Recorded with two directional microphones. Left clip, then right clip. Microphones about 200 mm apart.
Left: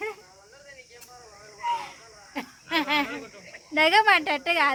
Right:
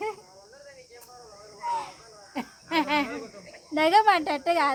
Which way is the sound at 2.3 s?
10° right (ahead or behind).